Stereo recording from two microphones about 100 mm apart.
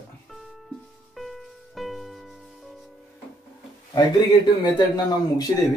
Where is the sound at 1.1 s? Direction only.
Centre (ahead or behind).